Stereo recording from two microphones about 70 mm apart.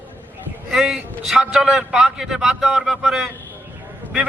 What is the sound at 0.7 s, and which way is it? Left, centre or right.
A man's voice, centre.